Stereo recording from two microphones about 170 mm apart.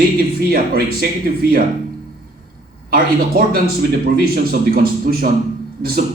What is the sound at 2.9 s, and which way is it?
A man's voice, 60° right (ahead or behind).